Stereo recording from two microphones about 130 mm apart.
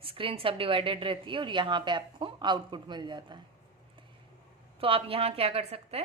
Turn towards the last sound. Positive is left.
turn(degrees=-50)  # may be behind; listen again after turning